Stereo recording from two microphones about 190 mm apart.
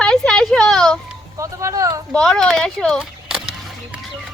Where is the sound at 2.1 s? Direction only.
5° left (ahead or behind).